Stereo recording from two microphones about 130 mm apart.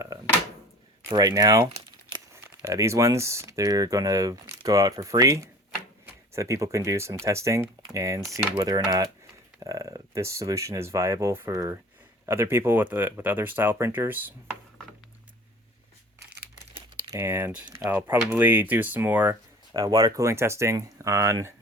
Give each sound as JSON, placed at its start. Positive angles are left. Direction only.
{"t": 1.1, "sound": "speech", "side_deg": -30}
{"t": 17.1, "sound": "speech", "side_deg": -20}